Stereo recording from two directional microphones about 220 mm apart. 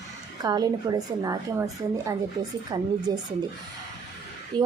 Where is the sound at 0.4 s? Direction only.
15° right (ahead or behind).